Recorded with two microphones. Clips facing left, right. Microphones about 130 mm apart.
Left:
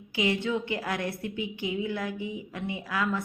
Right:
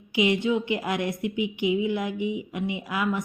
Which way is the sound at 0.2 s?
15° right (ahead or behind).